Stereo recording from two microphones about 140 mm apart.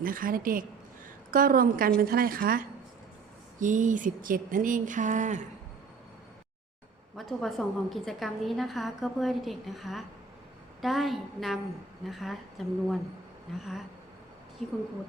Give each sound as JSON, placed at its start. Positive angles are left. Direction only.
{"t": 0.0, "sound": "a woman's voice", "side_deg": -90}
{"t": 3.6, "sound": "speech", "side_deg": -65}
{"t": 7.2, "sound": "a woman's voice", "side_deg": 0}
{"t": 14.6, "sound": "a woman's voice", "side_deg": 0}